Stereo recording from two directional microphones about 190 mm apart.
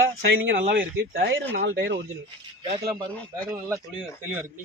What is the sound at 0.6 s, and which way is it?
Speech, 65° right (ahead or behind).